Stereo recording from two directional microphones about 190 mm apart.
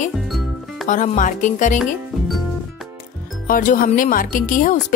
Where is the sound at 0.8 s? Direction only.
40° left (ahead or behind).